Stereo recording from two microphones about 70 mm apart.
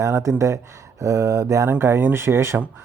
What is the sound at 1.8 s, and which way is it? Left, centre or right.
Speech, right.